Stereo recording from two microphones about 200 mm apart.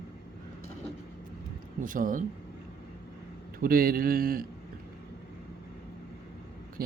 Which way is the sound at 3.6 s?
45° right (ahead or behind).